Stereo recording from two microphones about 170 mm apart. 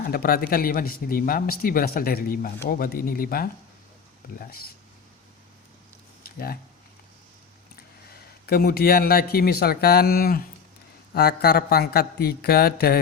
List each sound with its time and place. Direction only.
0.1 s speech: 60° left (ahead or behind)
6.2 s a sound: 60° left (ahead or behind)
8.4 s speech: 65° left (ahead or behind)